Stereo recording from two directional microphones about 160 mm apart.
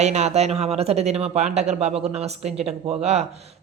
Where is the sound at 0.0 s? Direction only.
45° right (ahead or behind).